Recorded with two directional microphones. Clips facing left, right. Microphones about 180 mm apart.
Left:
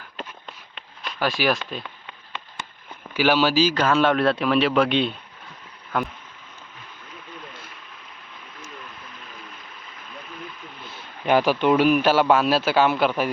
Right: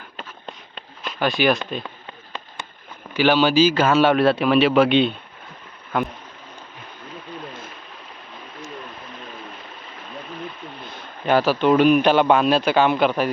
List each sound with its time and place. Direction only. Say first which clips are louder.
1.2 s a man's voice: right 3 dB; centre (ahead or behind)
1.8 s a sound: right 4 dB; 35° right (ahead or behind)
3.1 s a man's voice: right 2 dB; 10° left (ahead or behind)
11.3 s a man's voice: right 1 dB; 15° left (ahead or behind)